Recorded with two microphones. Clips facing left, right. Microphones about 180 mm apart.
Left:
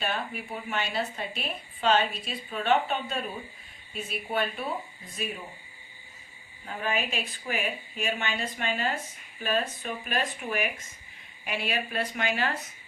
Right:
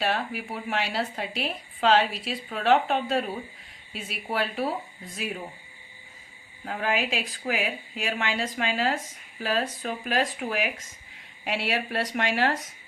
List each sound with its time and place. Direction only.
0.0 s a woman's voice: 80° right
6.7 s a woman's voice: 90° right
11.4 s speech: 80° right